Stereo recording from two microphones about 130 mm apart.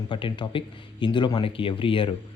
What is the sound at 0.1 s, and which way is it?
Speech, 40° left (ahead or behind).